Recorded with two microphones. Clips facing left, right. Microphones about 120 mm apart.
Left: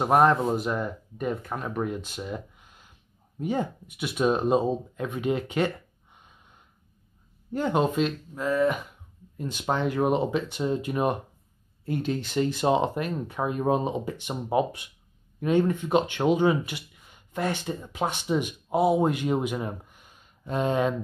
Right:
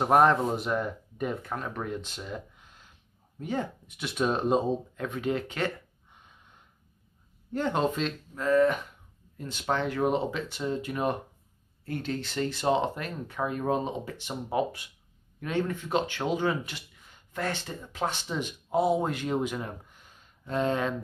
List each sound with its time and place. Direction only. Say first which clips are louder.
0.0 s speech: left 1 dB; centre (ahead or behind)
7.5 s speech: left 3 dB; 10° left (ahead or behind)